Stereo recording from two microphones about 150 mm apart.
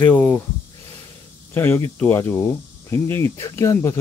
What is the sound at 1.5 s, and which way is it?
Speech, 15° left (ahead or behind).